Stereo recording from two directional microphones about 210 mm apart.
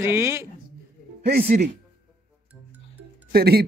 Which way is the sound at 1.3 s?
50° right (ahead or behind).